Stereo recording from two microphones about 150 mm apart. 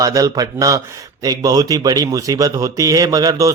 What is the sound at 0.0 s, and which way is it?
A man's voice, 25° right (ahead or behind).